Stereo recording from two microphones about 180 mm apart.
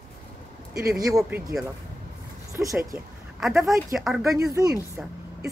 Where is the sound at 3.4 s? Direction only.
Centre (ahead or behind).